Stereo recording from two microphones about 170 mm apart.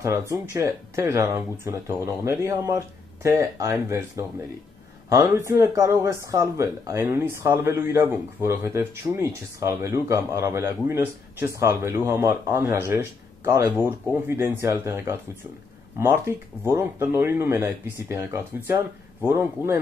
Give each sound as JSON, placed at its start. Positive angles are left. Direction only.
{"t": 0.0, "sound": "speech", "side_deg": -15}